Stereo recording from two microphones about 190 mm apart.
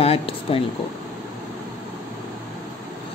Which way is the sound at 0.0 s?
30° left (ahead or behind).